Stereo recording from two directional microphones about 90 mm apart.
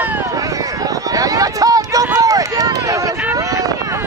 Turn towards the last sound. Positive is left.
turn(degrees=-40)  # may be behind; listen again after turning